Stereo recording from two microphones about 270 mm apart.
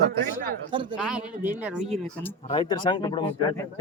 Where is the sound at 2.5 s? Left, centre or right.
Centre.